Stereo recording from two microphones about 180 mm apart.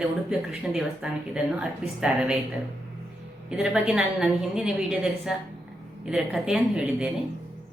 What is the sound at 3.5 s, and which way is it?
Speech, 5° right (ahead or behind).